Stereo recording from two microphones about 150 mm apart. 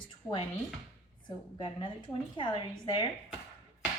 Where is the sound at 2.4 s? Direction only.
35° left (ahead or behind).